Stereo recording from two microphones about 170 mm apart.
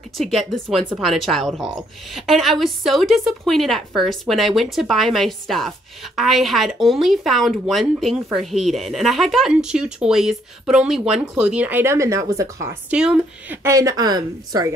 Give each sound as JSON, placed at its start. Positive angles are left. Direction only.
{"t": 0.2, "sound": "speech", "side_deg": 0}
{"t": 12.9, "sound": "speech", "side_deg": -5}
{"t": 13.7, "sound": "a woman's voice", "side_deg": -20}